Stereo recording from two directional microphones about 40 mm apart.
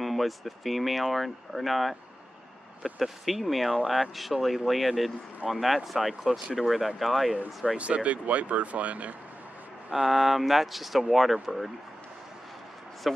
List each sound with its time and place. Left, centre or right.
0.0 s speech: centre
7.6 s speech: right
9.9 s speech: centre
13.0 s speech: centre